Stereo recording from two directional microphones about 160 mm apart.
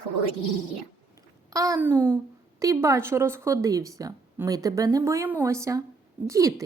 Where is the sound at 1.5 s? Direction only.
20° right (ahead or behind).